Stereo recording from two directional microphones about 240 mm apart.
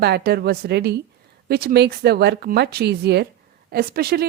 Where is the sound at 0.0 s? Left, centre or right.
Right.